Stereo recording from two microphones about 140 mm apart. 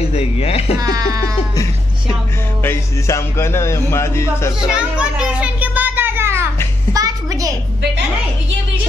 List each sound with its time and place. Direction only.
0.1 s speech: 45° left (ahead or behind)
0.7 s speech: 25° right (ahead or behind)
2.6 s speech: 20° left (ahead or behind)
4.9 s children playing: 10° right (ahead or behind)
6.9 s music: 25° right (ahead or behind)